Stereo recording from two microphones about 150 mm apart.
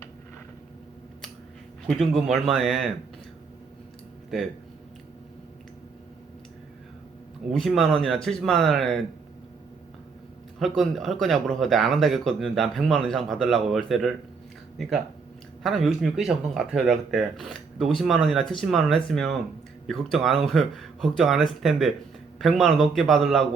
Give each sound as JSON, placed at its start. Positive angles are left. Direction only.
{"t": 1.9, "sound": "speech", "side_deg": 0}
{"t": 7.5, "sound": "speech", "side_deg": 0}
{"t": 10.8, "sound": "speech", "side_deg": 0}